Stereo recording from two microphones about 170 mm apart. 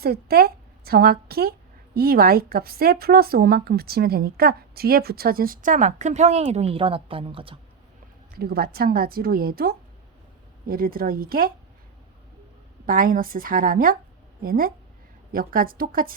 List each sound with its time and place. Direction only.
0.0 s a woman's voice: 65° right (ahead or behind); by 7.6 s 30° right (ahead or behind)
8.4 s a woman's voice: 65° right (ahead or behind)
12.8 s a woman's voice: 55° right (ahead or behind)